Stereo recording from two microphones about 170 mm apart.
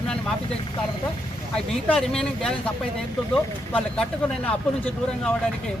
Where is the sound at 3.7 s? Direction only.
10° left (ahead or behind).